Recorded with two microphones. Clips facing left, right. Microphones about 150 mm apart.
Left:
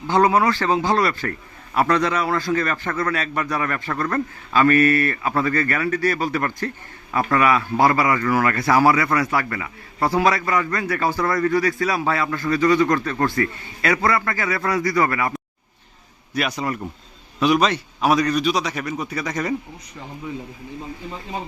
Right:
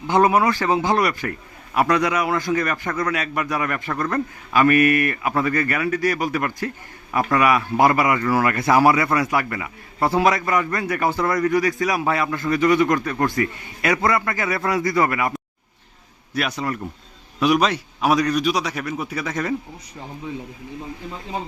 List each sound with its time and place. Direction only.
0.1 s a man's voice: 20° right (ahead or behind)
16.3 s a man's voice: centre (ahead or behind)
17.4 s a man's voice: 5° right (ahead or behind)